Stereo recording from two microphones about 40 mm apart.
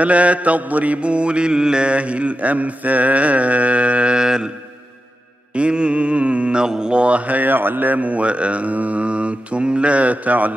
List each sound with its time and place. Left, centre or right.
0.0 s mantra: right; by 4.5 s centre
5.5 s mantra: right